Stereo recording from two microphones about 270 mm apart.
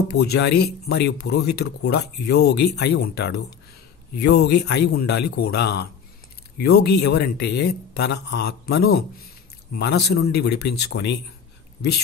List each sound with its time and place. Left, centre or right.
0.1 s speech: left